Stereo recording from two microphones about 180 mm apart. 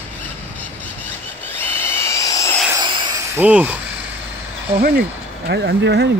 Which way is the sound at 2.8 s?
25° right (ahead or behind).